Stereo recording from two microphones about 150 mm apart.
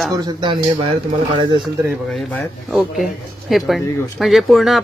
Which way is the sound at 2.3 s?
Centre (ahead or behind).